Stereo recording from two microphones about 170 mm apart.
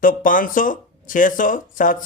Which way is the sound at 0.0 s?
55° left (ahead or behind).